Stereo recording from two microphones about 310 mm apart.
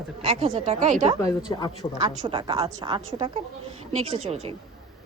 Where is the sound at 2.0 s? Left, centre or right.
Centre.